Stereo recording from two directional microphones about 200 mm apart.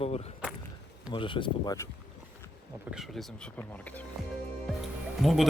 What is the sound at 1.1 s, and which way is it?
Speech, 25° left (ahead or behind).